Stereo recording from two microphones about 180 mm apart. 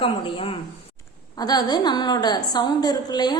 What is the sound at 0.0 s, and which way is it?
A woman's voice, 30° left (ahead or behind).